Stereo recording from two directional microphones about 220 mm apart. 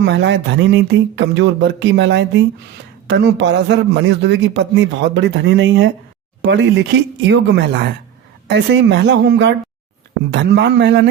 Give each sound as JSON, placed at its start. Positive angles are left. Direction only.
{"t": 0.0, "sound": "a man's voice", "side_deg": -55}